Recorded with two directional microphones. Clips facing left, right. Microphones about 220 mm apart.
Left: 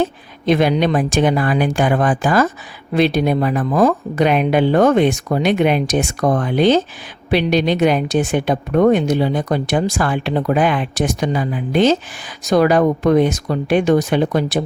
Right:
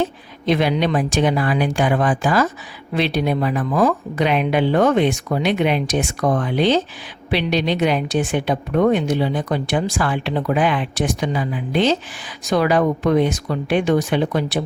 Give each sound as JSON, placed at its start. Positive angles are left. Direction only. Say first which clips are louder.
{"t": 0.4, "sound": "a woman's voice", "louder": "left 3 dB", "side_deg": 45}